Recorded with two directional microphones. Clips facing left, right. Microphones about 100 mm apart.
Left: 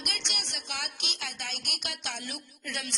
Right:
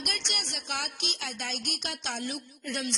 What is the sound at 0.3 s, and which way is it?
Speech, 45° right (ahead or behind).